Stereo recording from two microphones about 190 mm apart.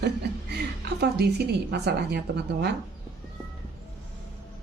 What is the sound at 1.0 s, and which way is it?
A woman's voice, 60° right (ahead or behind).